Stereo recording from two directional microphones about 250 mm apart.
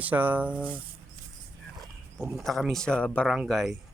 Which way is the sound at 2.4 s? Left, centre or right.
Centre.